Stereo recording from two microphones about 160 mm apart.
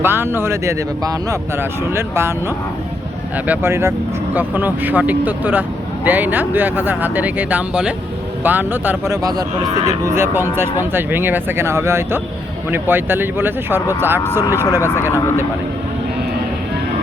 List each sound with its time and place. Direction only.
0.0 s speech: 15° right (ahead or behind)
3.3 s speech: 10° right (ahead or behind)
14.8 s speech: 15° left (ahead or behind)
15.0 s speech: 15° right (ahead or behind)